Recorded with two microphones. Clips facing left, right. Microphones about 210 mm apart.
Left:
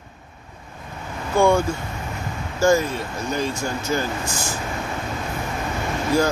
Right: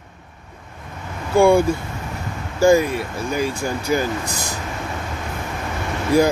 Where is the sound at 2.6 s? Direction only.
15° right (ahead or behind).